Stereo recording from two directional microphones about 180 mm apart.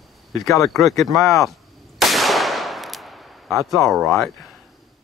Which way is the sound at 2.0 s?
Centre (ahead or behind).